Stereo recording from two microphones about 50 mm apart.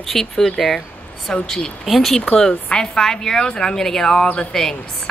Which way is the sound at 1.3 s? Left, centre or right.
Centre.